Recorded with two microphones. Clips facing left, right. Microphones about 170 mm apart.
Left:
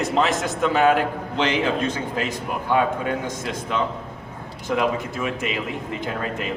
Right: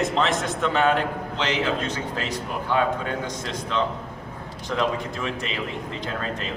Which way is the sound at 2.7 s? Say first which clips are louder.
Left 2 dB; 15° left (ahead or behind).